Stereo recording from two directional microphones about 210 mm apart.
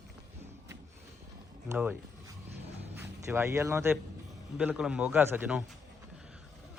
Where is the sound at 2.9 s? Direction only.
10° right (ahead or behind).